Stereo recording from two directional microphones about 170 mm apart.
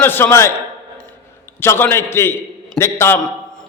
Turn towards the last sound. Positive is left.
turn(degrees=15)  # may be behind; listen again after turning